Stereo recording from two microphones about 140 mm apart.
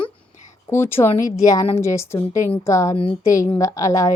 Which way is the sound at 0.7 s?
15° left (ahead or behind).